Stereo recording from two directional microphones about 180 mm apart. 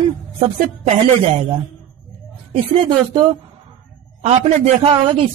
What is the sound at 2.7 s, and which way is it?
Speech, 30° right (ahead or behind).